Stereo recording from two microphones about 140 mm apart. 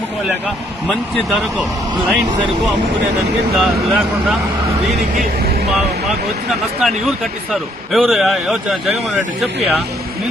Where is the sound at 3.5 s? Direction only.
Centre (ahead or behind).